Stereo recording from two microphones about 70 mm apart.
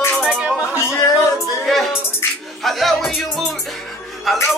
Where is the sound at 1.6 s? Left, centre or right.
Centre.